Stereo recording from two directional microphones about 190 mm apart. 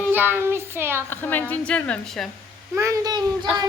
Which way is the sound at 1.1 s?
10° left (ahead or behind).